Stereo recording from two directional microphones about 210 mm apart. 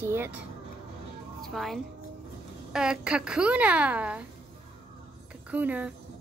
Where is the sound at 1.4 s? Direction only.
Centre (ahead or behind).